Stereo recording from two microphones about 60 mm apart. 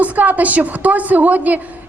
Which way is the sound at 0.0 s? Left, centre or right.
Right.